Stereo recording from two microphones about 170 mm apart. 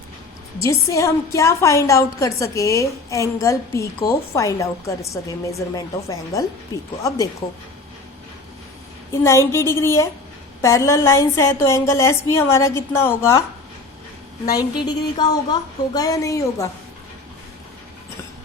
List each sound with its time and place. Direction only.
0.6 s a woman's voice: 15° left (ahead or behind)
7.4 s speech: 35° left (ahead or behind)
9.2 s a woman's voice: 15° left (ahead or behind)
14.8 s a sound: 25° left (ahead or behind)